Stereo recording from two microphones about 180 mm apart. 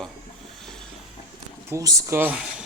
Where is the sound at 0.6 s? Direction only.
5° left (ahead or behind).